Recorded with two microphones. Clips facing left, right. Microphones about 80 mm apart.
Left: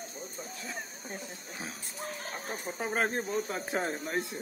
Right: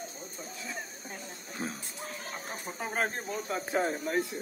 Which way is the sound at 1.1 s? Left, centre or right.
Centre.